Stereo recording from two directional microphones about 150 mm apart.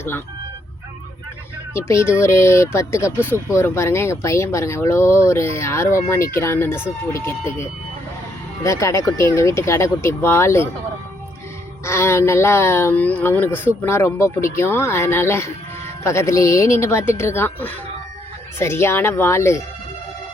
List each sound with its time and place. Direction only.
1.7 s speech: 20° left (ahead or behind)
11.9 s speech: 15° left (ahead or behind)